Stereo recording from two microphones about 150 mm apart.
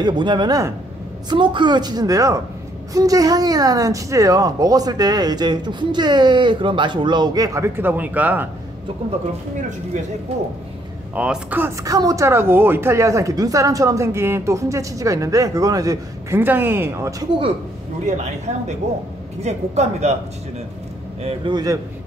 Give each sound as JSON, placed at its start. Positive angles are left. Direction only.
{"t": 0.0, "sound": "speech", "side_deg": -30}
{"t": 11.1, "sound": "speech", "side_deg": -10}
{"t": 18.0, "sound": "speech", "side_deg": -50}
{"t": 21.2, "sound": "a man's voice", "side_deg": -35}